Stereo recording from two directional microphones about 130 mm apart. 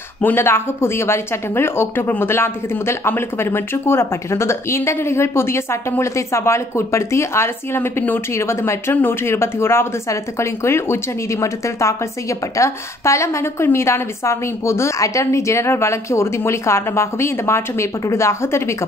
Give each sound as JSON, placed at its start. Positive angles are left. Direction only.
{"t": 0.2, "sound": "speech", "side_deg": 15}